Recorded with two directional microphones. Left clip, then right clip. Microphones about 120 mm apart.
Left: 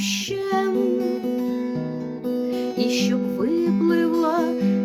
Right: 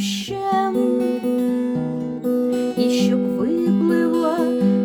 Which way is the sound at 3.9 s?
15° left (ahead or behind).